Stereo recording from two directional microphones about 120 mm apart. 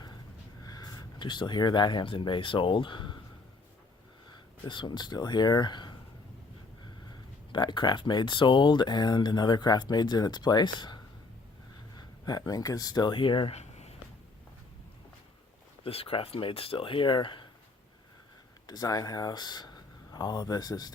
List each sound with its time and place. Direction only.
0.6 s speech: 35° left (ahead or behind)
4.7 s speech: 40° left (ahead or behind)
7.5 s speech: 40° left (ahead or behind)
13.5 s a sound: 65° left (ahead or behind)
15.8 s speech: 50° left (ahead or behind)
18.6 s speech: 30° left (ahead or behind)